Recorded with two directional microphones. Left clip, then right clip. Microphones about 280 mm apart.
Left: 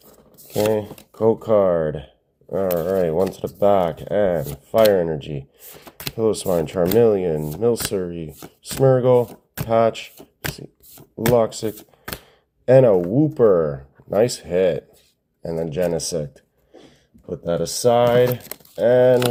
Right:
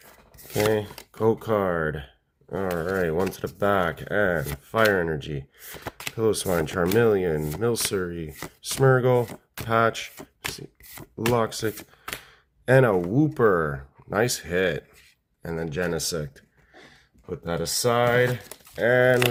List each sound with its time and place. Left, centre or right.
0.3 s cutlery: centre
0.7 s speech: right
11.3 s speech: right
17.3 s speech: right